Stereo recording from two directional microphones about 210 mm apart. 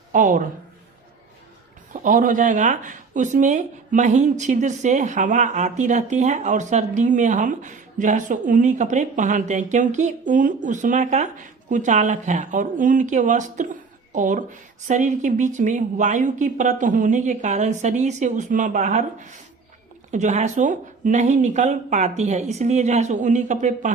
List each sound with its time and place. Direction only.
0.1 s speech: 40° right (ahead or behind)
1.9 s speech: 40° right (ahead or behind)